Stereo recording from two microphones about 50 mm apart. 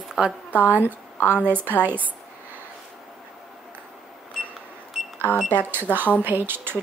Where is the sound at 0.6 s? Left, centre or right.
Right.